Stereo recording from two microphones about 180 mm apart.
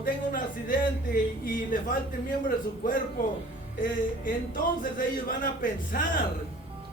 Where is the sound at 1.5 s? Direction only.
50° left (ahead or behind).